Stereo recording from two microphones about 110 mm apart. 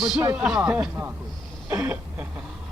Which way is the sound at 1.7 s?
15° right (ahead or behind).